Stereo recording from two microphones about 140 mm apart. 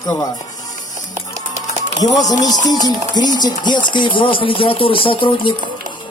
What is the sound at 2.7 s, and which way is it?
Speech, 30° left (ahead or behind).